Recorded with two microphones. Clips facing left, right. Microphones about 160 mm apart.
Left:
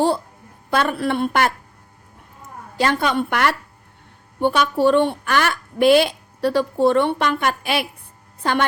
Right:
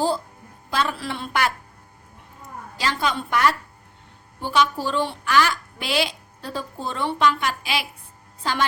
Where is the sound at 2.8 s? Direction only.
60° left (ahead or behind).